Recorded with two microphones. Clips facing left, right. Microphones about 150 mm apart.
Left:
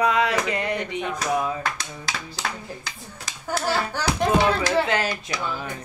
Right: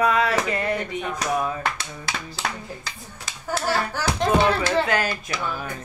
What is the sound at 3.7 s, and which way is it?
Speech, 20° left (ahead or behind).